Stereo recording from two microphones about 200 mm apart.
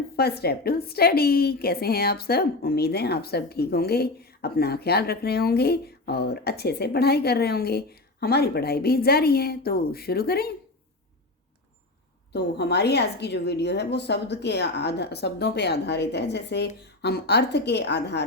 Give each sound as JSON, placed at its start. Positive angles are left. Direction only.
{"t": 0.2, "sound": "a woman's voice", "side_deg": 55}
{"t": 12.3, "sound": "a woman's voice", "side_deg": 55}